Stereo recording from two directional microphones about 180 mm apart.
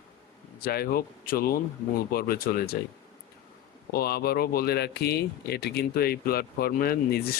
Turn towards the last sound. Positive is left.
turn(degrees=60)  # may be behind; listen again after turning